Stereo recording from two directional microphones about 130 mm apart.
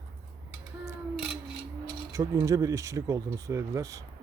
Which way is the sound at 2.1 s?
25° right (ahead or behind).